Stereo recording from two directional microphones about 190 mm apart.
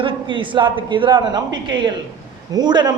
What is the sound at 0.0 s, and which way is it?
Speech, 25° right (ahead or behind).